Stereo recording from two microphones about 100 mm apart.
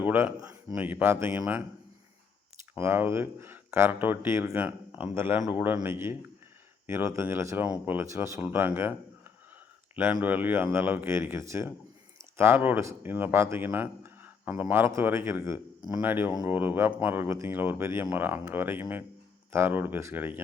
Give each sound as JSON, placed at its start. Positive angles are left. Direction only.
{"t": 0.1, "sound": "a man's voice", "side_deg": -15}
{"t": 2.7, "sound": "speech", "side_deg": -25}
{"t": 9.9, "sound": "speech", "side_deg": -15}